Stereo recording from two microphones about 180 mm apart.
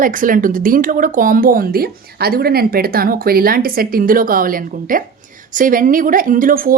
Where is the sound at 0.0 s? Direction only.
50° right (ahead or behind).